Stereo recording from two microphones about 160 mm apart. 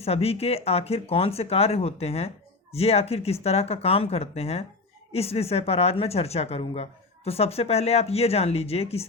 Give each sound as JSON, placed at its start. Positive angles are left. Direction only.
{"t": 0.0, "sound": "speech", "side_deg": 40}